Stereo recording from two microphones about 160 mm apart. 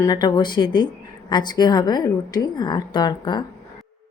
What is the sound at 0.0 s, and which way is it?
A woman's voice, 25° left (ahead or behind).